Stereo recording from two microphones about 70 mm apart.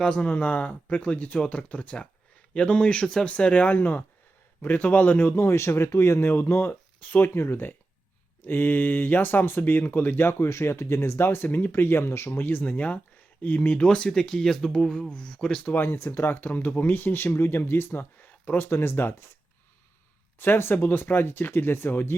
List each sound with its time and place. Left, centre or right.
0.0 s speech: centre; by 6.7 s left
7.0 s speech: left
7.3 s speech: left
13.8 s speech: centre
15.7 s speech: left
20.4 s speech: left